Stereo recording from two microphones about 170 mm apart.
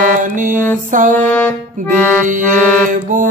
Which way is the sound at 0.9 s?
50° right (ahead or behind).